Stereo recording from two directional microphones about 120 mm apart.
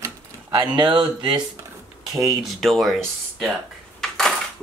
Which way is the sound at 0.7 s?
40° right (ahead or behind).